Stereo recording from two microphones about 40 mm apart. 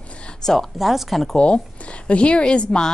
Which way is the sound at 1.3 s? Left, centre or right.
Left.